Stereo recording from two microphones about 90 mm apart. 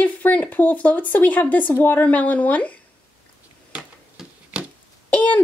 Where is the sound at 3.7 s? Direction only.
10° right (ahead or behind).